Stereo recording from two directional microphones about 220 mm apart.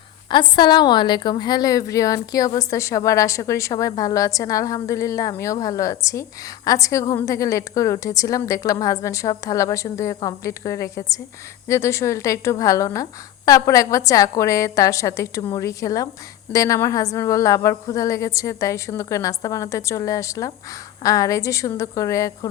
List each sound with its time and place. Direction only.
0.3 s a woman's voice: 20° left (ahead or behind)